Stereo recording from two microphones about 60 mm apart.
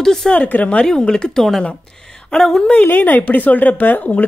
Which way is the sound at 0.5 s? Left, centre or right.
Left.